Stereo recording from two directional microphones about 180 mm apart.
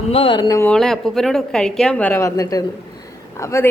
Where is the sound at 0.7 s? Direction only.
5° left (ahead or behind).